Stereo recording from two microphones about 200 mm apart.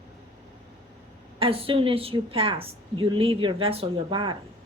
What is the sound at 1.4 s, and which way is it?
A woman's voice, 25° right (ahead or behind).